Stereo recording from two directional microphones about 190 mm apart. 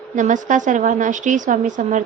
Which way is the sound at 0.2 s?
40° right (ahead or behind).